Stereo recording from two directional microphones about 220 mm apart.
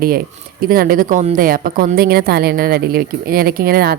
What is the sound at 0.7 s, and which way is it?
A woman's voice, 40° right (ahead or behind).